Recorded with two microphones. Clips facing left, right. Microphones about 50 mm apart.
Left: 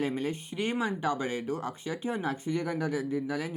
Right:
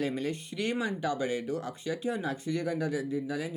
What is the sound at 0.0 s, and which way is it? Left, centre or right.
Speech, left.